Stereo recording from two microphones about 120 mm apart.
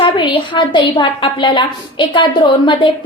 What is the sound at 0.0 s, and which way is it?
A woman's voice, 45° left (ahead or behind).